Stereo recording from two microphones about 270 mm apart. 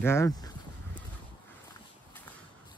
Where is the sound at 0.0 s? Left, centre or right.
Centre.